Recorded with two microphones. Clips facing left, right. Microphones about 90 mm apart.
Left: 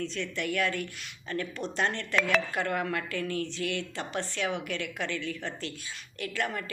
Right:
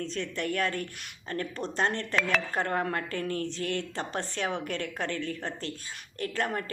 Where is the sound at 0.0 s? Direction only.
40° right (ahead or behind).